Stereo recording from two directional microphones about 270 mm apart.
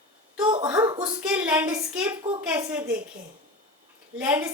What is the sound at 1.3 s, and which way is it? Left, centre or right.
A woman's voice, centre.